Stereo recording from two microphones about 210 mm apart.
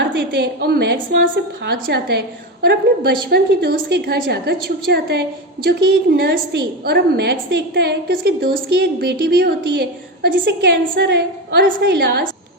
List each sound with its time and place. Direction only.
0.3 s a woman's voice: 50° right (ahead or behind)